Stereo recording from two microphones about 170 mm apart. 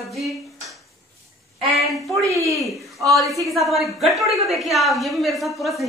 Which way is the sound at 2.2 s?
20° right (ahead or behind).